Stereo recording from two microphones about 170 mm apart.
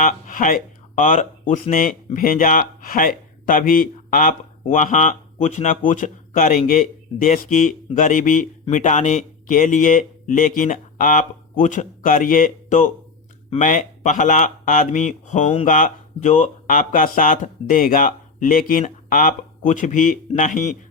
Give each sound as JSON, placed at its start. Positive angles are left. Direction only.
{"t": 0.0, "sound": "speech", "side_deg": 55}